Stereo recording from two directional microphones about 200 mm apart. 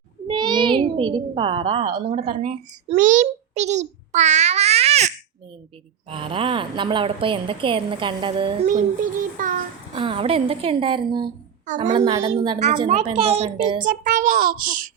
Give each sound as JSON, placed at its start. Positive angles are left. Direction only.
{"t": 0.3, "sound": "a child's voice", "side_deg": -20}
{"t": 8.6, "sound": "a child's voice", "side_deg": -40}
{"t": 9.9, "sound": "a woman's voice", "side_deg": -25}
{"t": 12.5, "sound": "a child's voice", "side_deg": -35}
{"t": 13.8, "sound": "a child's voice", "side_deg": -40}